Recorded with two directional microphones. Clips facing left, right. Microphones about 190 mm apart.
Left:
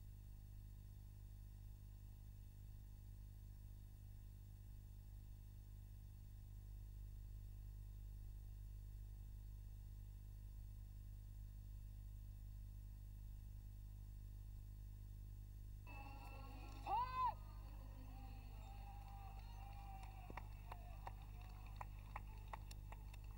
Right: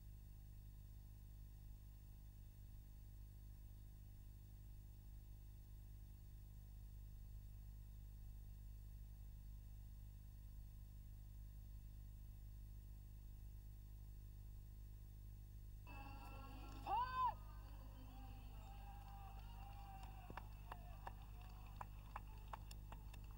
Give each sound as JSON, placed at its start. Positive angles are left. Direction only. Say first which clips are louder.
{"t": 15.9, "sound": "music", "louder": "right 1 dB", "side_deg": 5}